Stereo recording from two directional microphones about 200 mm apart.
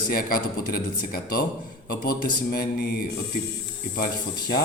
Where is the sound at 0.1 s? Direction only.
50° left (ahead or behind).